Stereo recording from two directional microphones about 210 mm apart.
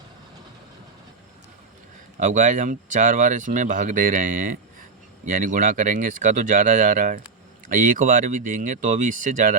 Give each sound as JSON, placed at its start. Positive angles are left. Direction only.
{"t": 2.1, "sound": "speech", "side_deg": -35}